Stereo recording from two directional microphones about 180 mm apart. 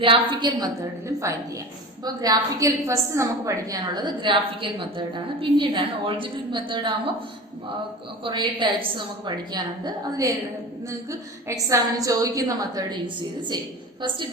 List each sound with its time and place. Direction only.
0.0 s a woman's voice: 30° right (ahead or behind)
8.2 s a woman's voice: 25° right (ahead or behind)